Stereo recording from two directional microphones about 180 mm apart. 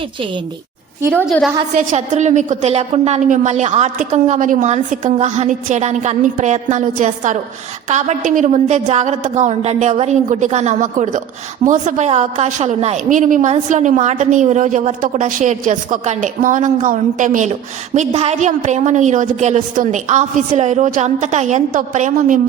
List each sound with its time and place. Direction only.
1.1 s a woman's voice: centre (ahead or behind)
1.7 s a woman's voice: 40° right (ahead or behind)